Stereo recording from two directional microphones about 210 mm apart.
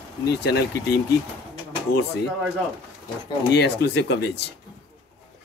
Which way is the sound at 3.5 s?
55° left (ahead or behind).